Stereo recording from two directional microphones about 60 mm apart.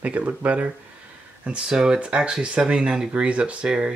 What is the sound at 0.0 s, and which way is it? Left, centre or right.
Speech, right.